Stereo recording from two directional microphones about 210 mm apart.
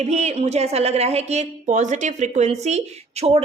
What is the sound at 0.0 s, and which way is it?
A woman's voice, 30° right (ahead or behind).